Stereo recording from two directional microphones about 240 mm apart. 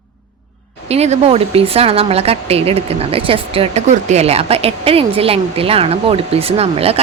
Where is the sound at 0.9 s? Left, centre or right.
Right.